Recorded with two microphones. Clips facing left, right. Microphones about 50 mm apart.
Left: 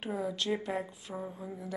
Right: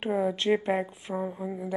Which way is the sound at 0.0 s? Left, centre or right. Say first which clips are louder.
Right 8 dB; right.